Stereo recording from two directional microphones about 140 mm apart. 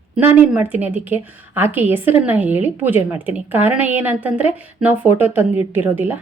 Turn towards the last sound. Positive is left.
turn(degrees=-10)  # may be behind; listen again after turning